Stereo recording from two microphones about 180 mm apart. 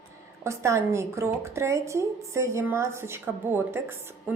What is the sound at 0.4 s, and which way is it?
A woman's voice, 15° right (ahead or behind).